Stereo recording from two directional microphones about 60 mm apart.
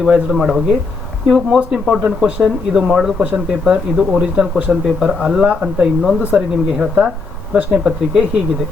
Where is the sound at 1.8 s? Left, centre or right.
Centre.